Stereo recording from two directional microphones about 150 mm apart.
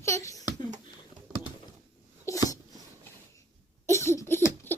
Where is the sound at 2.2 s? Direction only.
20° left (ahead or behind).